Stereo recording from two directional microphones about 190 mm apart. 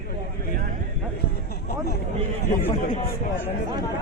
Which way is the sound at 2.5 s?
50° left (ahead or behind).